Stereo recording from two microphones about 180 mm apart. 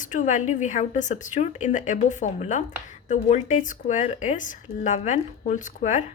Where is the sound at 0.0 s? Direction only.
45° left (ahead or behind).